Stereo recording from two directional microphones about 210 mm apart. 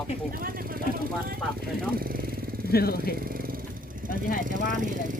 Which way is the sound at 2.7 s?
45° left (ahead or behind).